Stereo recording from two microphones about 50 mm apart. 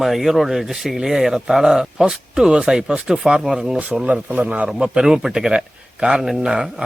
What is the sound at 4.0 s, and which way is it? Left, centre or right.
Speech, right.